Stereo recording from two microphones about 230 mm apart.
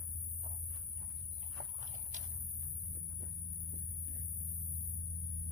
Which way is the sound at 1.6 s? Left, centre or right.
Right.